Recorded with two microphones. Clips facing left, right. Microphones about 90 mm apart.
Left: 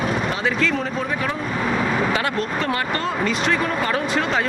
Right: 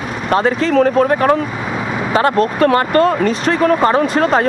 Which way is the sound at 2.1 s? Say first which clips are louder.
Right 10 dB; 40° right (ahead or behind).